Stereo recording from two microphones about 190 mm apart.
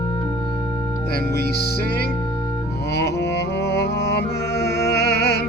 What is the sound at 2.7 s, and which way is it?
Music, 60° left (ahead or behind).